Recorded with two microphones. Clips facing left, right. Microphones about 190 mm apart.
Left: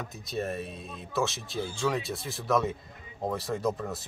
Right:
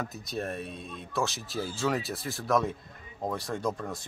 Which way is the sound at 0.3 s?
Centre (ahead or behind).